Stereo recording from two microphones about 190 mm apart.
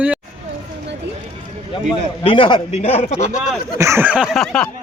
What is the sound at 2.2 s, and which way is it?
A man's voice, 25° left (ahead or behind).